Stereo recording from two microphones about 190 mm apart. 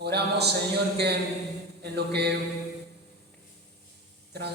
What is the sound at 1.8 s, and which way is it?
Speech, 60° right (ahead or behind).